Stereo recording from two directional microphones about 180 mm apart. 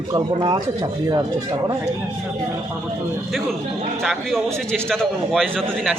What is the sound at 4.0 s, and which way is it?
A man's voice, centre (ahead or behind).